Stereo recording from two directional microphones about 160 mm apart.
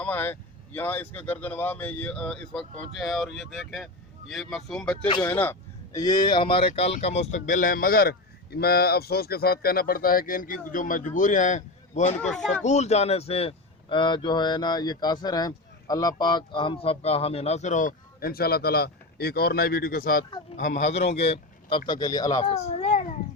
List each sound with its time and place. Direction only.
0.0 s a man's voice: 10° left (ahead or behind); by 12.1 s 50° left (ahead or behind)
12.1 s speech: 5° left (ahead or behind)
12.6 s speech: 45° left (ahead or behind); by 20.2 s 60° left (ahead or behind)
20.6 s a man's voice: 50° left (ahead or behind)
21.8 s speech: 25° left (ahead or behind)
22.4 s a sound: 40° left (ahead or behind)